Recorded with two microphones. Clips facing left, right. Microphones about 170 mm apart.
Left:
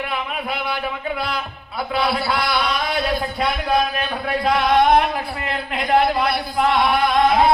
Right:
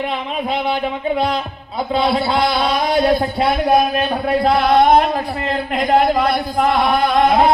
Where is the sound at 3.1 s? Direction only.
35° right (ahead or behind).